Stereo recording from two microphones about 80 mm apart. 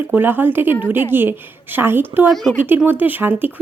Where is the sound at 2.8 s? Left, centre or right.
Right.